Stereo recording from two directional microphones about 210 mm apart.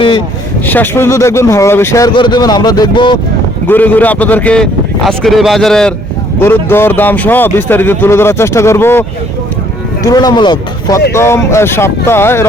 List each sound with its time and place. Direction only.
0.6 s speech: 10° left (ahead or behind)
3.7 s a man's voice: 10° left (ahead or behind)